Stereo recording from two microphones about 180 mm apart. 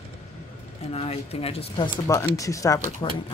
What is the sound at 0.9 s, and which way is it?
Speech, 35° left (ahead or behind).